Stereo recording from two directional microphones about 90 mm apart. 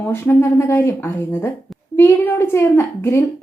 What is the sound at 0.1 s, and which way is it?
A woman's voice, 25° left (ahead or behind).